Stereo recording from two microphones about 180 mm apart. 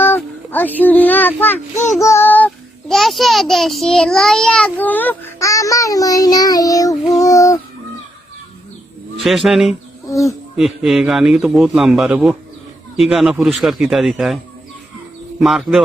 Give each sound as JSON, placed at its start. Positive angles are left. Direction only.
{"t": 0.0, "sound": "a child's voice", "side_deg": 10}
{"t": 9.2, "sound": "a man's voice", "side_deg": 0}
{"t": 10.1, "sound": "speech", "side_deg": 15}
{"t": 10.6, "sound": "a man's voice", "side_deg": 0}
{"t": 15.4, "sound": "a man's voice", "side_deg": 0}